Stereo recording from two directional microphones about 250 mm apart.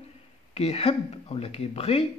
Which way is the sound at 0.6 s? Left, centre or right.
Left.